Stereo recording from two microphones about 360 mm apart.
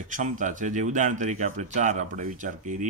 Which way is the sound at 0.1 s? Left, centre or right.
Right.